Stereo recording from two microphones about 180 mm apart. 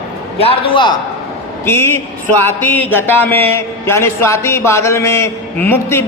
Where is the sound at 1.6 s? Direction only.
15° left (ahead or behind).